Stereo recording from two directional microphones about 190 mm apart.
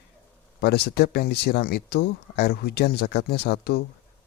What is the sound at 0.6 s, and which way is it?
Speech, 55° left (ahead or behind).